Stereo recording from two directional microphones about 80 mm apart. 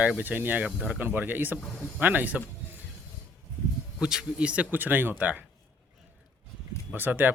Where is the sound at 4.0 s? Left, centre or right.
Centre.